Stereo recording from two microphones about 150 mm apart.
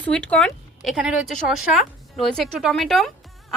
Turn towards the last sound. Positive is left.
turn(degrees=0)  # may be behind; listen again after turning